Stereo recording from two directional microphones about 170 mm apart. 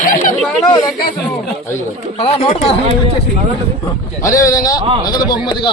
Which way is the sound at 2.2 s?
35° left (ahead or behind).